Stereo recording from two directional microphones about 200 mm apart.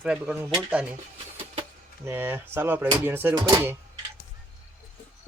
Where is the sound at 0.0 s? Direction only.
5° right (ahead or behind).